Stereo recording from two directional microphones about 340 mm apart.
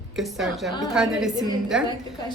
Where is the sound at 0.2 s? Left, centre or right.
Centre.